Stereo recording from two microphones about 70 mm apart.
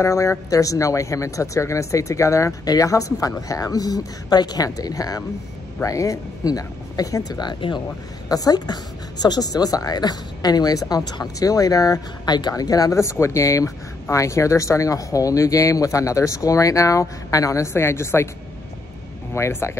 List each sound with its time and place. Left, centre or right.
0.0 s speech: left
2.6 s speech: left
4.6 s speech: left
7.3 s speech: left
8.3 s speech: left
17.7 s a woman's voice: left
19.3 s a woman's voice: left